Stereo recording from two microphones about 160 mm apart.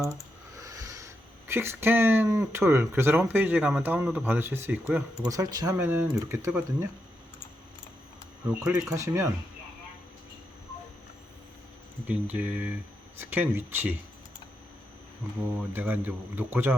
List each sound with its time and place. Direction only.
0.0 s a sound: 20° right (ahead or behind)
2.4 s speech: 15° right (ahead or behind)
5.1 s speech: 20° right (ahead or behind)
8.8 s speech: 20° right (ahead or behind)
12.0 s speech: 10° right (ahead or behind)
15.7 s speech: 10° right (ahead or behind)